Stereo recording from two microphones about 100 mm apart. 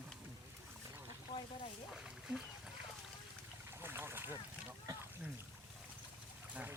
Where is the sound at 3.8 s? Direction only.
20° right (ahead or behind).